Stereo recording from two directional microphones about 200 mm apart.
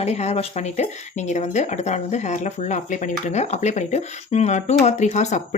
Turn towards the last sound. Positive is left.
turn(degrees=35)  # may be behind; listen again after turning